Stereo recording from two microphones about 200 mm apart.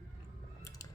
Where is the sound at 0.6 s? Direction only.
15° left (ahead or behind).